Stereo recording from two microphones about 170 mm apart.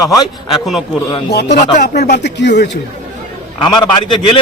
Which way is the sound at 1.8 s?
70° left (ahead or behind).